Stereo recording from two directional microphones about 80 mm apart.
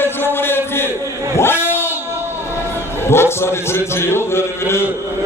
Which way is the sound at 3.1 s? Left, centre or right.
Left.